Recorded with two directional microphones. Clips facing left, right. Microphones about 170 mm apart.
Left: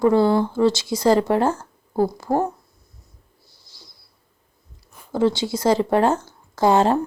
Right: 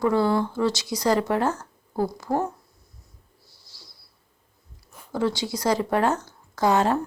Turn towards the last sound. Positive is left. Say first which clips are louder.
# left 4 dB
turn(degrees=30)  # may be behind; listen again after turning